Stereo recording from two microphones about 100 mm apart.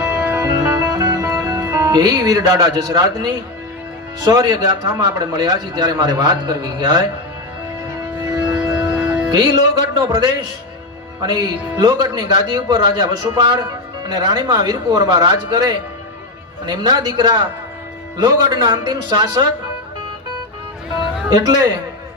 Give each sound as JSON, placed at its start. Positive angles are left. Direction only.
{"t": 0.0, "sound": "music", "side_deg": -20}
{"t": 0.4, "sound": "music", "side_deg": -40}
{"t": 4.2, "sound": "a man's voice", "side_deg": -40}
{"t": 8.4, "sound": "music", "side_deg": -15}
{"t": 9.4, "sound": "a man's voice", "side_deg": -45}
{"t": 21.2, "sound": "a man's voice", "side_deg": -40}